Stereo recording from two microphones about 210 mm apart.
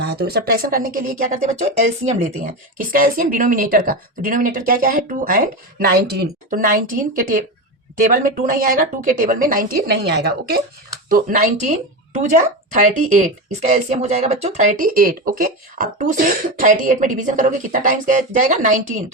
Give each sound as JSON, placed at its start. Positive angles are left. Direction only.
{"t": 0.0, "sound": "a woman's voice", "side_deg": -50}